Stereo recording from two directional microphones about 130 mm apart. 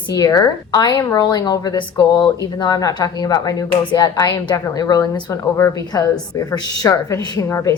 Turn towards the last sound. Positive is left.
turn(degrees=20)  # may be behind; listen again after turning